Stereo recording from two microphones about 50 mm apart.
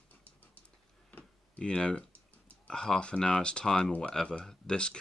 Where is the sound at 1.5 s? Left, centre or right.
Centre.